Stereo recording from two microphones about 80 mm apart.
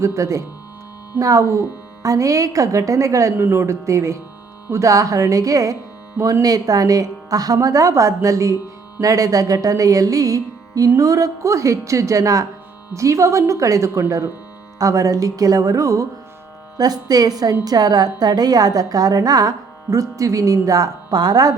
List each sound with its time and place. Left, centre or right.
0.0 s a woman's voice: right
6.4 s a woman's voice: right
16.7 s a woman's voice: right